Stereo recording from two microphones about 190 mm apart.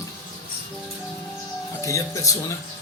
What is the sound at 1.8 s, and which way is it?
Speech, 15° left (ahead or behind).